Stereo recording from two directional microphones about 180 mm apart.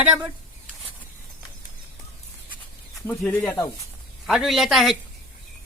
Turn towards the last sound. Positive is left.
turn(degrees=0)  # may be behind; listen again after turning